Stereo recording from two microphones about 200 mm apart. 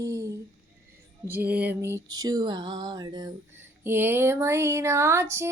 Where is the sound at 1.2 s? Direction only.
10° right (ahead or behind).